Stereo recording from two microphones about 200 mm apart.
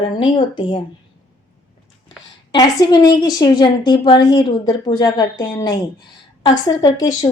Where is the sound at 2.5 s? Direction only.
20° left (ahead or behind).